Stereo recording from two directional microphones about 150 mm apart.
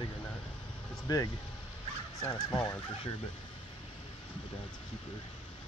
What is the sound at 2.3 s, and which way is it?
Speech, 25° left (ahead or behind).